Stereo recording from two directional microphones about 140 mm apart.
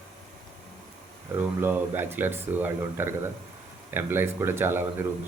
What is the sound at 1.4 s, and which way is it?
Speech, 15° right (ahead or behind).